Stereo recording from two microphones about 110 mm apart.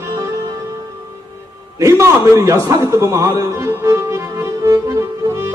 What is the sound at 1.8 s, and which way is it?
A man's voice, 25° right (ahead or behind).